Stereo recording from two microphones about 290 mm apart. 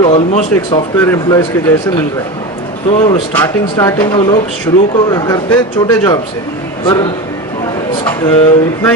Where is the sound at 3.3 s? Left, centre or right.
Centre.